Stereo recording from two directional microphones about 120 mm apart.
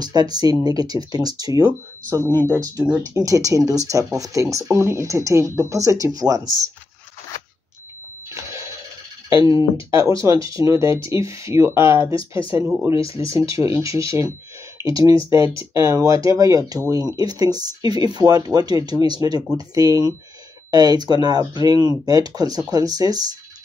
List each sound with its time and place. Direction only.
0.0 s speech: 35° right (ahead or behind)
1.7 s speech: 20° right (ahead or behind)
9.8 s speech: 25° right (ahead or behind)